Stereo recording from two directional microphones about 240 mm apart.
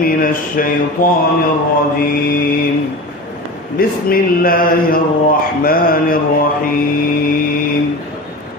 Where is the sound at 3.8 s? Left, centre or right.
Left.